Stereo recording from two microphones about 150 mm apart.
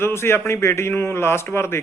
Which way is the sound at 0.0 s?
15° left (ahead or behind).